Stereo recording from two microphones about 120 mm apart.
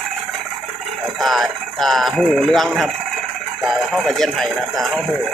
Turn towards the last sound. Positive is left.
turn(degrees=0)  # may be behind; listen again after turning